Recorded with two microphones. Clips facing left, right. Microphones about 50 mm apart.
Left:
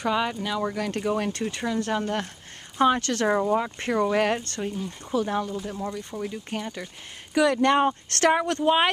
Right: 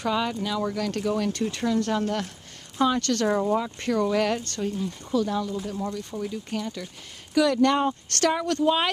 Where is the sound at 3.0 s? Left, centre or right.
Centre.